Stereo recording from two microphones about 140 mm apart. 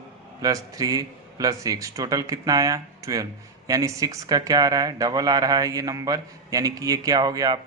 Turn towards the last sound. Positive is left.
turn(degrees=-30)  # may be behind; listen again after turning